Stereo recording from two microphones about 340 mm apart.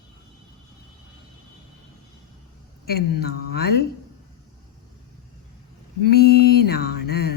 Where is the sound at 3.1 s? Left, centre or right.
Left.